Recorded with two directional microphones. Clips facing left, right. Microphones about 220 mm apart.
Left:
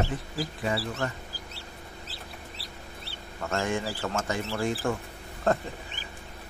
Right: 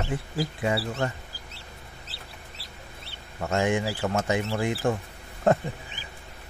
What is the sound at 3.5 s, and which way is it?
A man's voice, 20° right (ahead or behind).